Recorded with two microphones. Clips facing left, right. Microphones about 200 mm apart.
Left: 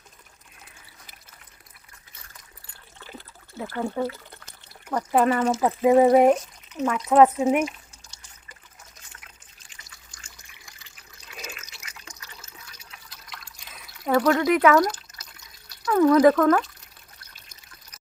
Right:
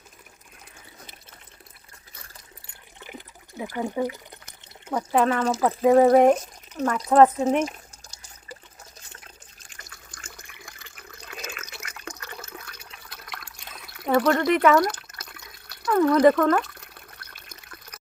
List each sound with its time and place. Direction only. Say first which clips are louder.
3.0 s water: right 1 dB; 15° right (ahead or behind)
5.1 s speech: left 1 dB; 5° left (ahead or behind)
7.6 s water: even; 40° right (ahead or behind)
9.6 s water: right 5 dB; 50° right (ahead or behind)
11.4 s liquid: right 3 dB; 55° right (ahead or behind)
13.0 s water: right 5 dB; 60° right (ahead or behind)
14.0 s speech: even; centre (ahead or behind)
14.8 s water: even; 60° right (ahead or behind)
15.9 s a sound: left 1 dB; 5° left (ahead or behind)
16.3 s speech: left 2 dB; centre (ahead or behind)
16.6 s water: right 7 dB; 60° right (ahead or behind)